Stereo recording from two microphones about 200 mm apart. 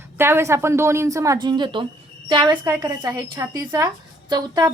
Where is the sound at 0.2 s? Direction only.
10° right (ahead or behind).